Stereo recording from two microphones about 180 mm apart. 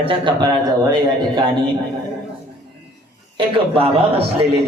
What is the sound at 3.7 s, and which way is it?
Speech, 30° right (ahead or behind).